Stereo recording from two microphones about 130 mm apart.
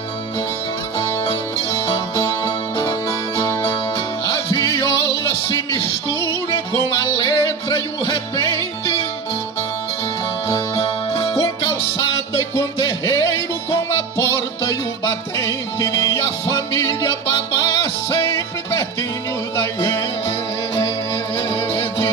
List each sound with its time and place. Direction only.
4.6 s music: 25° left (ahead or behind)
6.2 s music: 25° left (ahead or behind)
7.2 s music: 40° left (ahead or behind)
10.5 s music: 45° left (ahead or behind)
12.4 s music: 25° left (ahead or behind)
21.4 s music: 20° left (ahead or behind)